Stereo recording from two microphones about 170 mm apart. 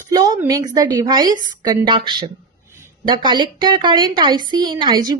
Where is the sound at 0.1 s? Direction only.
20° right (ahead or behind).